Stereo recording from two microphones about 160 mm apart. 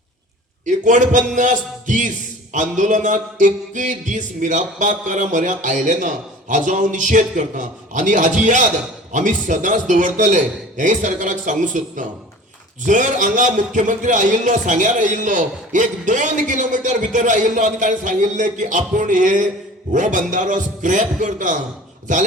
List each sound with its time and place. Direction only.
0.6 s a man's voice: 50° right (ahead or behind)